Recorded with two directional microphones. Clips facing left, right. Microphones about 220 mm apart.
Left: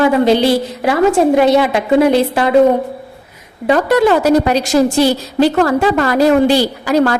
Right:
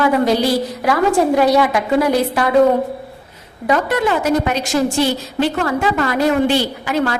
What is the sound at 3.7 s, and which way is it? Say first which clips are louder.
A woman's voice: left 6 dB; 35° left (ahead or behind).